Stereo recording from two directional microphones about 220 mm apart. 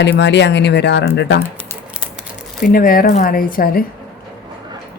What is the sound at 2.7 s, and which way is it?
Speech, 40° left (ahead or behind).